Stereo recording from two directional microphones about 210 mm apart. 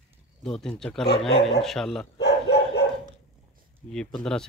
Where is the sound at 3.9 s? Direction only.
5° left (ahead or behind).